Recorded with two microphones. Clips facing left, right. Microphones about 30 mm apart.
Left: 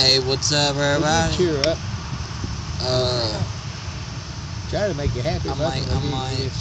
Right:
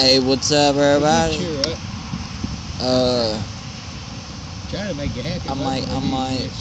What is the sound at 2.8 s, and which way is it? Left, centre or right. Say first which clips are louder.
Speech: right 4 dB; right.